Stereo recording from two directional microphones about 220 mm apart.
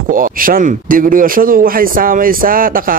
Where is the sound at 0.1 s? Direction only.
40° right (ahead or behind).